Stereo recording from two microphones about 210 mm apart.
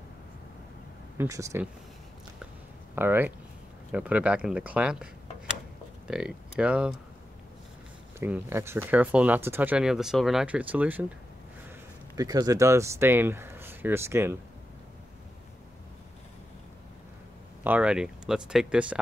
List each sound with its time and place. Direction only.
1.1 s speech: 15° right (ahead or behind)
3.0 s speech: 10° right (ahead or behind)
6.0 s speech: 5° right (ahead or behind)
8.2 s speech: 10° right (ahead or behind)
12.2 s speech: 15° right (ahead or behind)
17.6 s speech: 5° right (ahead or behind)